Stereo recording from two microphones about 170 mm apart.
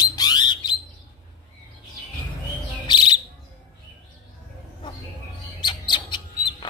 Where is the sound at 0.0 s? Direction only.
25° left (ahead or behind).